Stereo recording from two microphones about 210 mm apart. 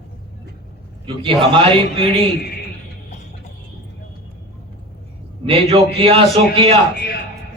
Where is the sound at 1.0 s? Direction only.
25° right (ahead or behind).